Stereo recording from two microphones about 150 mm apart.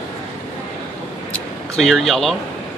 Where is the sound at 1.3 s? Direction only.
5° left (ahead or behind).